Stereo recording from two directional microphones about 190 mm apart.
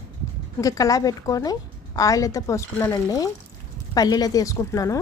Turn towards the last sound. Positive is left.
turn(degrees=15)  # may be behind; listen again after turning